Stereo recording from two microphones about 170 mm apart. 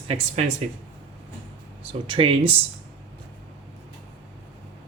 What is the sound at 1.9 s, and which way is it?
Speech, 30° right (ahead or behind).